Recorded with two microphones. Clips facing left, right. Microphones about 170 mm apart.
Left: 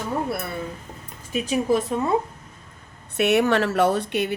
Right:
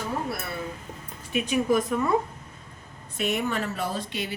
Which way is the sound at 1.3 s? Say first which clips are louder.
Left 2 dB; 35° left (ahead or behind).